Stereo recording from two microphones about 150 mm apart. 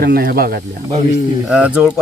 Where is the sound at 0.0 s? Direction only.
85° right.